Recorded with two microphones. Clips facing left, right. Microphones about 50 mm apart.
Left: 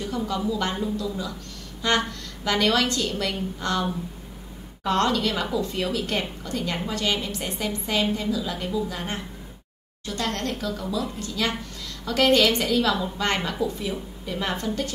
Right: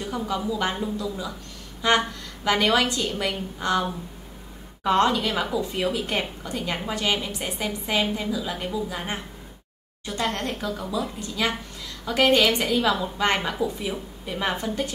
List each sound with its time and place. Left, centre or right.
0.0 s a woman's voice: centre